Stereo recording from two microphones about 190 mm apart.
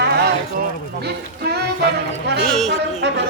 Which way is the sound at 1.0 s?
60° right (ahead or behind).